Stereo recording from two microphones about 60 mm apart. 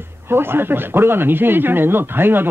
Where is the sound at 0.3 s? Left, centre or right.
Right.